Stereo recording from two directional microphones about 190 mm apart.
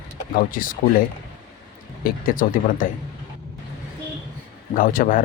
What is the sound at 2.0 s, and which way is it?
Speech, 45° left (ahead or behind).